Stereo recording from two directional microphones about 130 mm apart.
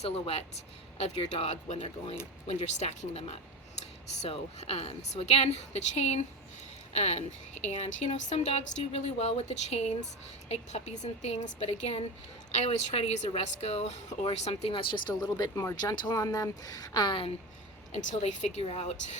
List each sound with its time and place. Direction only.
0.0 s speech: 50° left (ahead or behind)
14.7 s speech: 40° left (ahead or behind)
17.9 s speech: 60° left (ahead or behind)